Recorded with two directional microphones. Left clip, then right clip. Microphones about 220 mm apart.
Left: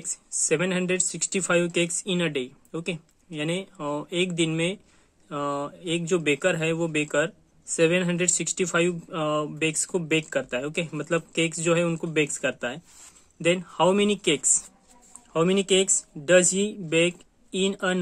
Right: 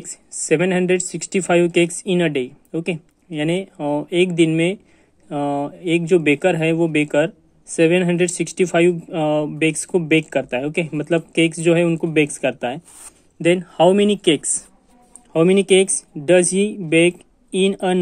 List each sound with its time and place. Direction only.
0.0 s speech: 15° right (ahead or behind)